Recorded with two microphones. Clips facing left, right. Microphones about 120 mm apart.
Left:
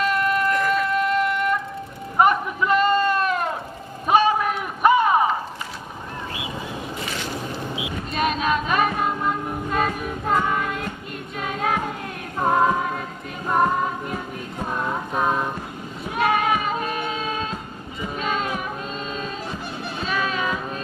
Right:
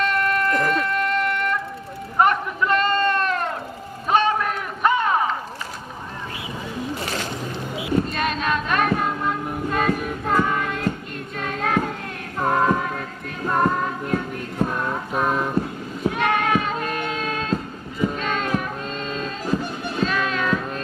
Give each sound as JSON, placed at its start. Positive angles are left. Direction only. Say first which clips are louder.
{"t": 0.0, "sound": "music", "louder": "even", "side_deg": 5}
{"t": 2.1, "sound": "sheep", "louder": "left 1 dB", "side_deg": 5}
{"t": 4.1, "sound": "run", "louder": "left 2 dB", "side_deg": 10}
{"t": 7.8, "sound": "a sound", "louder": "right 8 dB", "side_deg": -45}
{"t": 8.1, "sound": "music", "louder": "left 1 dB", "side_deg": 5}
{"t": 16.0, "sound": "child singing", "louder": "even", "side_deg": 5}
{"t": 18.0, "sound": "a sound", "louder": "right 2 dB", "side_deg": 5}
{"t": 20.0, "sound": "music", "louder": "right 2 dB", "side_deg": 5}